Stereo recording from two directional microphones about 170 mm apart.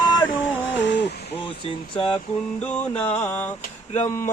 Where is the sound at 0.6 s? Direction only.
90° left.